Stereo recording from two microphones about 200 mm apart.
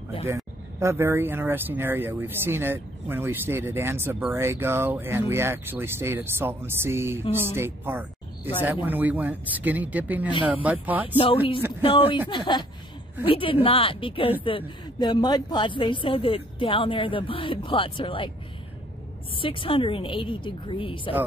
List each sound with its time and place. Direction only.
0.7 s speech: 15° right (ahead or behind)
11.1 s speech: 25° left (ahead or behind)
19.4 s speech: 25° left (ahead or behind)